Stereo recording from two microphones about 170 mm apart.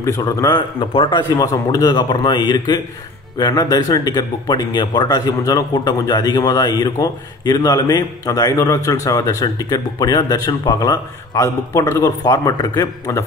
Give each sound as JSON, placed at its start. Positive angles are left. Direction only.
{"t": 0.0, "sound": "speech", "side_deg": 20}